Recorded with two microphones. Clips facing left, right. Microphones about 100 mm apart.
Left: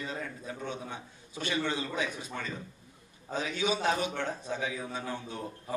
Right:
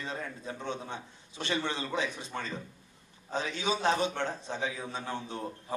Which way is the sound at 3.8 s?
25° right (ahead or behind).